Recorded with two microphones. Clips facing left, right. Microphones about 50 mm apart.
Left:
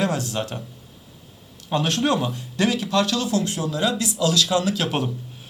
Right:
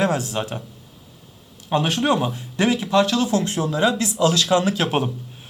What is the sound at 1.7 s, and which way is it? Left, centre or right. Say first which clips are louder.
Speech: right 2 dB; centre.